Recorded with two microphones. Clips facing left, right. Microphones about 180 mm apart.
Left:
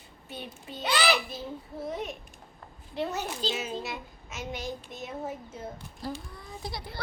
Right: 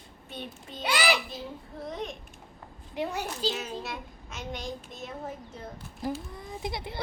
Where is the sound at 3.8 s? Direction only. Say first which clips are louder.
Left 1 dB; 5° left (ahead or behind).